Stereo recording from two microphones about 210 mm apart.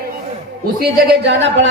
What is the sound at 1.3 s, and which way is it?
Speech, 55° right (ahead or behind).